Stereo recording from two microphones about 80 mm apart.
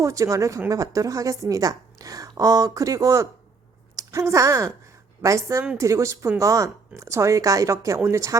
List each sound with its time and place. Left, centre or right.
0.0 s a woman's voice: right